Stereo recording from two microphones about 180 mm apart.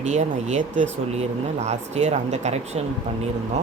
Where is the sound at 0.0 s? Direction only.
40° right (ahead or behind).